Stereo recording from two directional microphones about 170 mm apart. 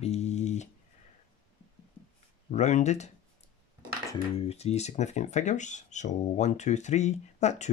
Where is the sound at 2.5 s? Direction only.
45° left (ahead or behind).